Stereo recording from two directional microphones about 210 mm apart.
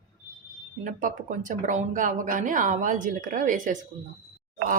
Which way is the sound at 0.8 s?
40° right (ahead or behind).